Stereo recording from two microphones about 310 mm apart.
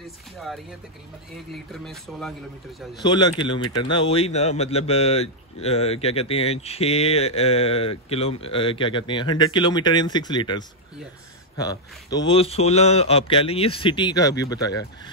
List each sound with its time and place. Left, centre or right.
0.0 s speech: centre
3.0 s speech: centre
11.6 s speech: centre